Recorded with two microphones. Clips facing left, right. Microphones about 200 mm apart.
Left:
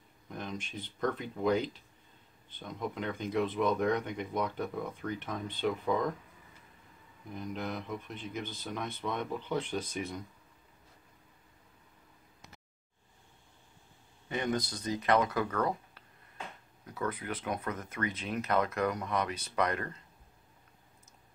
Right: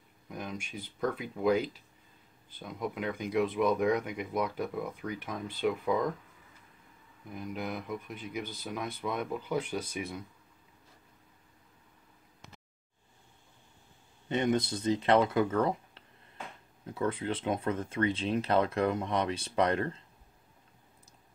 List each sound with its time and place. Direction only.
0.3 s speech: 10° right (ahead or behind)
7.3 s speech: 5° right (ahead or behind)
14.3 s speech: 25° right (ahead or behind)